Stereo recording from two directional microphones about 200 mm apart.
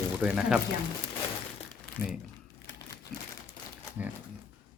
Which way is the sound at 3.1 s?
Centre (ahead or behind).